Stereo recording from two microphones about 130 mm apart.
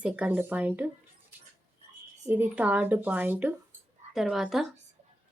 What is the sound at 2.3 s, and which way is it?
Speech, 15° right (ahead or behind).